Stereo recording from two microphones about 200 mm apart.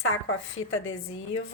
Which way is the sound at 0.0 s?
85° left.